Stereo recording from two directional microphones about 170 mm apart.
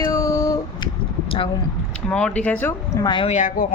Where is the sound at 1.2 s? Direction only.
30° left (ahead or behind).